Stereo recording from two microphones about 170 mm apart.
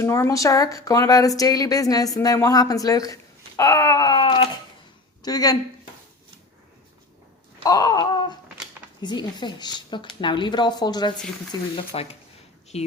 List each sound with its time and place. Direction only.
0.0 s speech: 15° left (ahead or behind)
7.6 s speech: 20° left (ahead or behind)
11.9 s speech: 35° left (ahead or behind)